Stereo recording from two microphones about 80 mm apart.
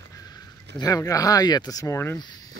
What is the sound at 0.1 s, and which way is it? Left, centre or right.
Speech, left.